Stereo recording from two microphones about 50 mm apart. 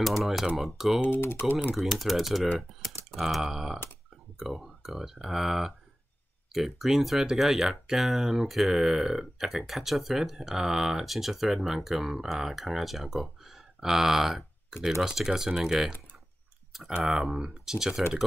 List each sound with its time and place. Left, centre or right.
0.0 s speech: centre
1.0 s speech: left
1.8 s speech: centre
17.0 s speech: centre